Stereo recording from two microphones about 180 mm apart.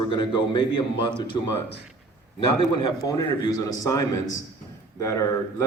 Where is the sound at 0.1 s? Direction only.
25° left (ahead or behind).